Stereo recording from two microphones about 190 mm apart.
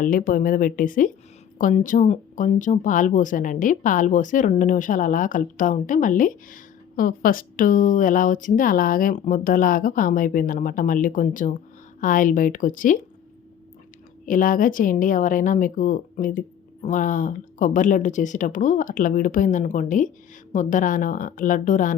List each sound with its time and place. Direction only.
0.0 s speech: 45° left (ahead or behind)
14.3 s speech: 45° left (ahead or behind)